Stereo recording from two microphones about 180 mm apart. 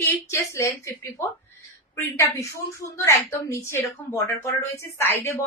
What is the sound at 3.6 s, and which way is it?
Speech, 15° left (ahead or behind).